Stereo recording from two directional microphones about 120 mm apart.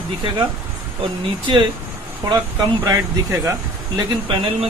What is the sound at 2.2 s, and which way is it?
Speech, 40° right (ahead or behind).